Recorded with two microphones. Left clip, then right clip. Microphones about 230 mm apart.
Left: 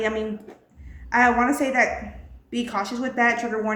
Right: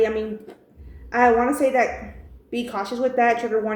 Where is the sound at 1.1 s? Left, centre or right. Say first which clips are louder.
Right 1 dB; left.